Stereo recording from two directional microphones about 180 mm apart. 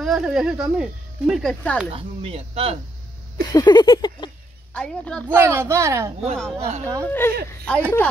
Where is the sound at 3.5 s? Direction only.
20° left (ahead or behind).